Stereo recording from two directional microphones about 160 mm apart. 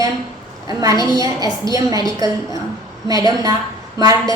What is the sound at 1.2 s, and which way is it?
A woman's voice, 20° right (ahead or behind).